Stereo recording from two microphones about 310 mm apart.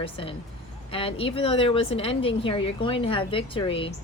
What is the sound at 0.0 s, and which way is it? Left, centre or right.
A woman's voice, centre.